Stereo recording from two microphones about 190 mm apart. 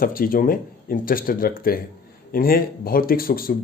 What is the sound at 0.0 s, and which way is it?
Speech, 50° left (ahead or behind).